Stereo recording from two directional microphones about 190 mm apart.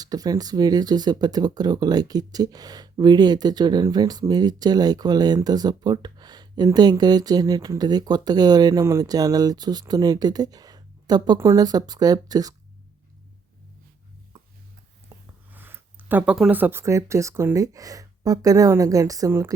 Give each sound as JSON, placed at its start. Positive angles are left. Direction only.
{"t": 0.0, "sound": "speech", "side_deg": -20}
{"t": 15.5, "sound": "speech", "side_deg": -10}